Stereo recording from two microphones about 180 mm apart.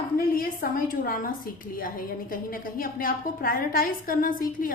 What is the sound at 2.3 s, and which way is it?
A woman's voice, 50° left (ahead or behind).